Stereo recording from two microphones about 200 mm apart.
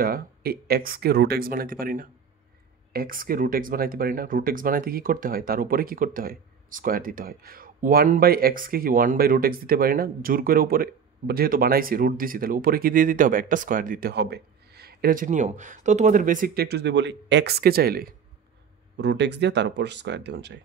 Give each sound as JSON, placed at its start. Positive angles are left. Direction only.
{"t": 0.0, "sound": "speech", "side_deg": -50}